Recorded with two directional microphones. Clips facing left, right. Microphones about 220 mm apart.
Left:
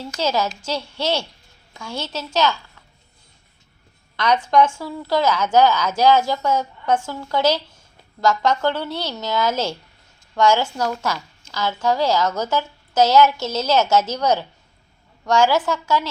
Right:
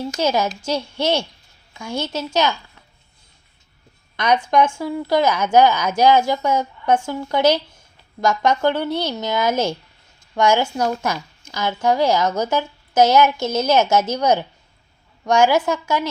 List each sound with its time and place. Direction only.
0.0 s speech: 15° right (ahead or behind)
2.1 s speech: 15° right (ahead or behind)
4.8 s speech: 15° right (ahead or behind)